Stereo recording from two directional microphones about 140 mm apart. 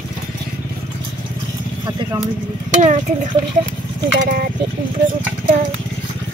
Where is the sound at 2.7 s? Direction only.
55° right (ahead or behind).